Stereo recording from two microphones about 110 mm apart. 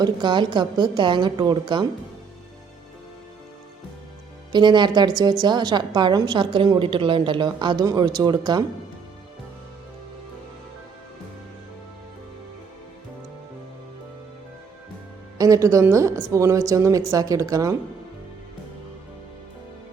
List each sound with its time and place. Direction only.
0.0 s a woman's voice: 45° right (ahead or behind)
4.5 s a woman's voice: 45° right (ahead or behind)
15.4 s a woman's voice: 30° right (ahead or behind)